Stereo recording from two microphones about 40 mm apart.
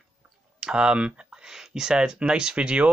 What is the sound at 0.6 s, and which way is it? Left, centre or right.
Speech, centre.